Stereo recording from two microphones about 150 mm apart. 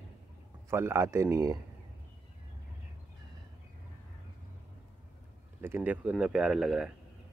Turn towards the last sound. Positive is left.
turn(degrees=-5)  # may be behind; listen again after turning